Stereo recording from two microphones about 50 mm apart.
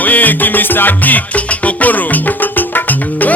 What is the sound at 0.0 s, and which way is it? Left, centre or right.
Music, left.